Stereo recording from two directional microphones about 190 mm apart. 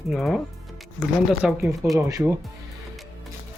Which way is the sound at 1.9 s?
20° right (ahead or behind).